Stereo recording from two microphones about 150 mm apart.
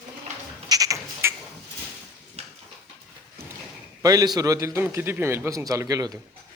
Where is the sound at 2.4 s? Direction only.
45° right (ahead or behind).